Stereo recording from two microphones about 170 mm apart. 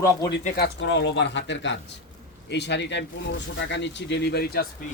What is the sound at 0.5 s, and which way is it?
Speech, 80° left.